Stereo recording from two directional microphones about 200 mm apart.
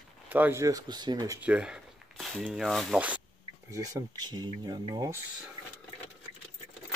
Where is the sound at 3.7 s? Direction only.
20° right (ahead or behind).